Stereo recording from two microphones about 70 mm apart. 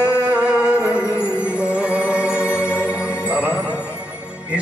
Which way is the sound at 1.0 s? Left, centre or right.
Left.